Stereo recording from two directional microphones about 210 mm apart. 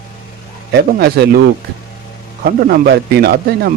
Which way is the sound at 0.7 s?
50° right (ahead or behind).